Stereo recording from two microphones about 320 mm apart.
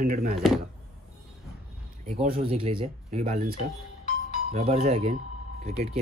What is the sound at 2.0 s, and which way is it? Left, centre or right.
Speech, right.